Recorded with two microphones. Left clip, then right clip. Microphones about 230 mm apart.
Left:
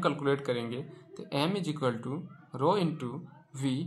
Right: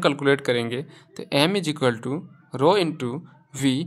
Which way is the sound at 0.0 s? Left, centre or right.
Right.